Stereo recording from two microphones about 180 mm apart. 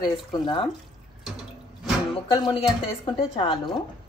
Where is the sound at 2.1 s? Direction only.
25° left (ahead or behind).